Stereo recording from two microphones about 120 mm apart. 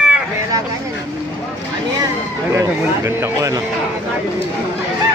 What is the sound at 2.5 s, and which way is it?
Speech, 25° right (ahead or behind).